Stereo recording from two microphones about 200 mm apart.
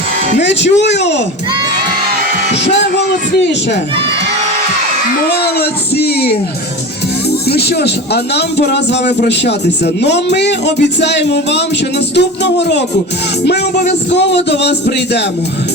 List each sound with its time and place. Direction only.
0.3 s speech: 60° left (ahead or behind)
5.4 s music: 55° left (ahead or behind)
7.4 s speech: 55° left (ahead or behind)
14.1 s speech: 60° left (ahead or behind)